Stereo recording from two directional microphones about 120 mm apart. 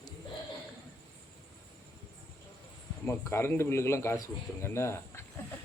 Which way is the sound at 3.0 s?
20° left (ahead or behind).